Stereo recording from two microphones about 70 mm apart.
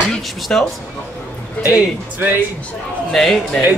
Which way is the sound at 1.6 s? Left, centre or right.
Right.